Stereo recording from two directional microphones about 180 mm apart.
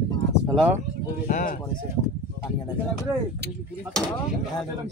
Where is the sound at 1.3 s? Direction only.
50° left (ahead or behind).